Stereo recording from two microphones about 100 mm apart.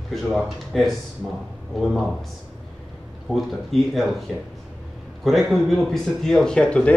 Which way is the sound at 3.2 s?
Centre (ahead or behind).